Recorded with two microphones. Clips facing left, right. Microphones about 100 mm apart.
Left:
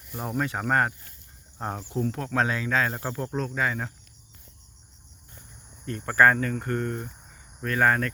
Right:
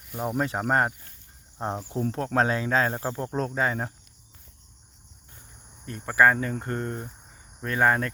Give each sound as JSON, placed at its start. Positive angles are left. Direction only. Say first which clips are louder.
{"t": 0.3, "sound": "speech", "louder": "even", "side_deg": -30}
{"t": 2.0, "sound": "speech", "louder": "right 1 dB", "side_deg": -35}
{"t": 3.3, "sound": "speech", "louder": "right 2 dB", "side_deg": -35}
{"t": 5.8, "sound": "speech", "louder": "even", "side_deg": -15}
{"t": 6.5, "sound": "speech", "louder": "left 2 dB", "side_deg": -25}